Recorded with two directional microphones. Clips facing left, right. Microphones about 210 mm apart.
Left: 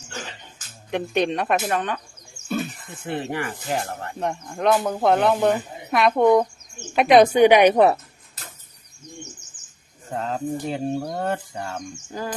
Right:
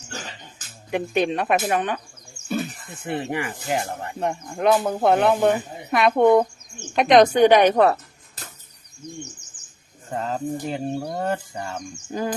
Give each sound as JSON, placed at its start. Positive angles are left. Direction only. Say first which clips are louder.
{"t": 0.9, "sound": "speech", "louder": "even", "side_deg": -5}
{"t": 3.1, "sound": "speech", "louder": "right 1 dB", "side_deg": -15}
{"t": 10.1, "sound": "speech", "louder": "even", "side_deg": 0}
{"t": 12.1, "sound": "speech", "louder": "right 5 dB", "side_deg": -15}